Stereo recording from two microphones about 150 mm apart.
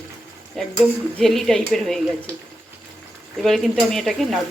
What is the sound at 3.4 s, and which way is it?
Speech, centre (ahead or behind).